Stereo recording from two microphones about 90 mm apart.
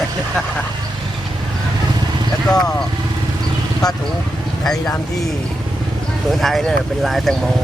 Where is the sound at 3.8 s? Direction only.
45° left (ahead or behind).